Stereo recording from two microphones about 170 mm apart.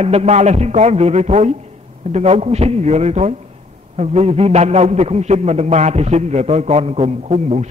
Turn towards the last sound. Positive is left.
turn(degrees=-40)  # may be behind; listen again after turning